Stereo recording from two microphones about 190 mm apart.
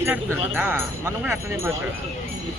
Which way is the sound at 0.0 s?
10° right (ahead or behind).